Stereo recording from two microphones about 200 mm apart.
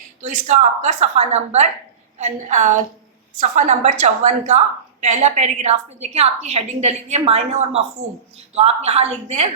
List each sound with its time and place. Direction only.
0.2 s a woman's voice: 35° right (ahead or behind)